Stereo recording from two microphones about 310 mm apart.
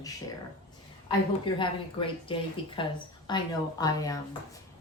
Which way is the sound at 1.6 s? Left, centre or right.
Centre.